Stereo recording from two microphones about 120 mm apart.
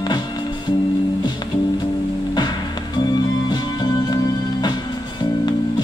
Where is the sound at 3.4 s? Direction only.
35° left (ahead or behind).